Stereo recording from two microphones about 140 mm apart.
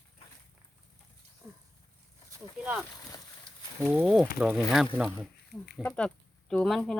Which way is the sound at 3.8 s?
5° right (ahead or behind).